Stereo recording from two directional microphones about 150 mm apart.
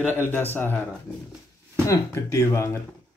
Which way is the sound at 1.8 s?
20° left (ahead or behind).